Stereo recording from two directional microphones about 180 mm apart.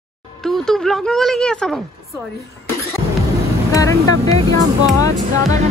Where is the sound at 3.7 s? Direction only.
20° left (ahead or behind).